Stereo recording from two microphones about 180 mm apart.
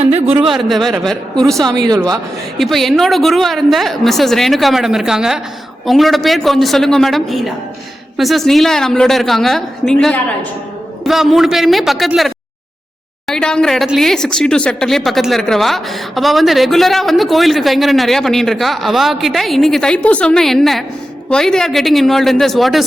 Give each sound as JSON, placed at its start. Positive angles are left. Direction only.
{"t": 0.0, "sound": "a sound", "side_deg": -35}
{"t": 0.3, "sound": "speech", "side_deg": 0}
{"t": 1.6, "sound": "speech", "side_deg": -20}
{"t": 2.6, "sound": "speech", "side_deg": 0}